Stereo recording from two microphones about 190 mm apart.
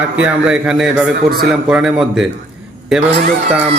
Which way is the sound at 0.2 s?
5° right (ahead or behind).